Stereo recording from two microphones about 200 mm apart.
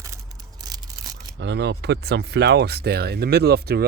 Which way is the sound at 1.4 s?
60° right (ahead or behind).